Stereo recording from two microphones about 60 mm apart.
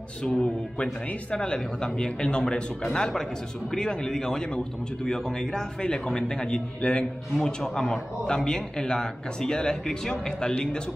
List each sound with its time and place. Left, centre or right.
0.2 s a man's voice: centre